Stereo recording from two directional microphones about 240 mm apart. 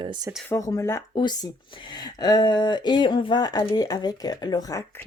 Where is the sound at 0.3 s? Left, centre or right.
Centre.